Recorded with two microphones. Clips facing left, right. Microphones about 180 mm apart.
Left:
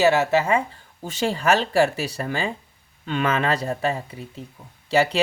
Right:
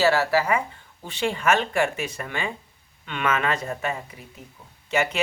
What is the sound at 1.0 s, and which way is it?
Speech, 40° left (ahead or behind).